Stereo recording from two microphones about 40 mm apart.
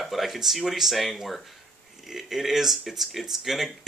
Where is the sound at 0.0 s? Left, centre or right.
Centre.